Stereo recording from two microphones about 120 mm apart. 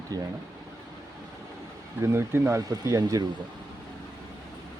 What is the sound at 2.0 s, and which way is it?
Speech, 20° right (ahead or behind).